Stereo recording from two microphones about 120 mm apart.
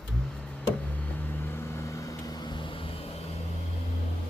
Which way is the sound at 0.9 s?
15° left (ahead or behind).